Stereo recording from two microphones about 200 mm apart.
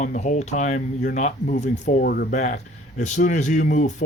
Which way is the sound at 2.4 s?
35° left (ahead or behind).